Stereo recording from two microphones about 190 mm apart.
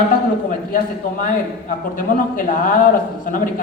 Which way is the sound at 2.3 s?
45° left (ahead or behind).